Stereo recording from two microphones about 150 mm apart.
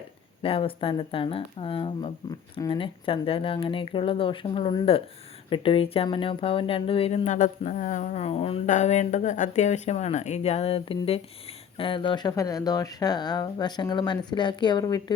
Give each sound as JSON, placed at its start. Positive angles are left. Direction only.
{"t": 0.4, "sound": "speech", "side_deg": 35}